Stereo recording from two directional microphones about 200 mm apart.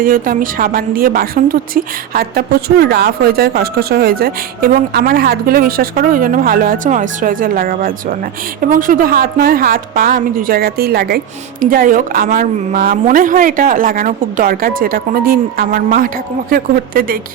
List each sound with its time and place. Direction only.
0.0 s a woman's voice: 45° right (ahead or behind)